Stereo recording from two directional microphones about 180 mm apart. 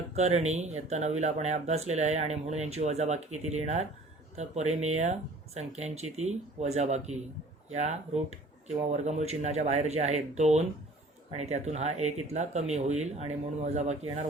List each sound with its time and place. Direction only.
0.2 s speech: 40° right (ahead or behind)